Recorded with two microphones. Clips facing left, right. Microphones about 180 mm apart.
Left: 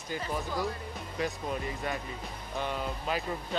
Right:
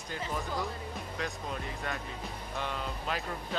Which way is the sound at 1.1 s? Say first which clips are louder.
Left 6 dB; 5° left (ahead or behind).